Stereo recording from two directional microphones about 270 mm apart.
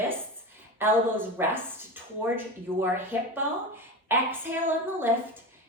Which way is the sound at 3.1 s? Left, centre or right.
Centre.